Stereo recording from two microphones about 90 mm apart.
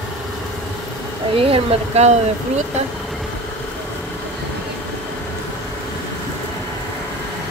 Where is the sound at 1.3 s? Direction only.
90° right.